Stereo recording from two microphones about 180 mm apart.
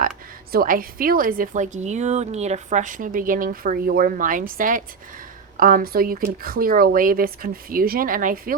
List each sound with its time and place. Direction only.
0.5 s a woman's voice: 55° right (ahead or behind)